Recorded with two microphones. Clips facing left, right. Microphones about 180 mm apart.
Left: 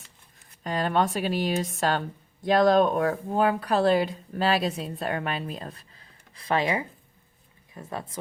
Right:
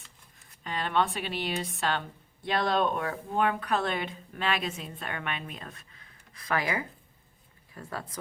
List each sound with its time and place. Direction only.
0.6 s a woman's voice: 40° left (ahead or behind); by 8.2 s 25° left (ahead or behind)